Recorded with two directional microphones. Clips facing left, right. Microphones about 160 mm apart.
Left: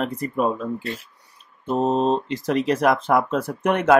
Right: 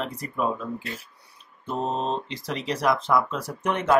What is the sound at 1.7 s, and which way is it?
Speech, 45° left (ahead or behind).